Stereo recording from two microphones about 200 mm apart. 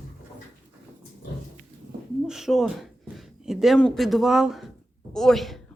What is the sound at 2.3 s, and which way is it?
Speech, centre (ahead or behind).